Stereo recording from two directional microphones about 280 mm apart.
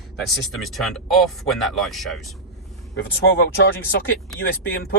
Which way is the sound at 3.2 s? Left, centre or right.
Left.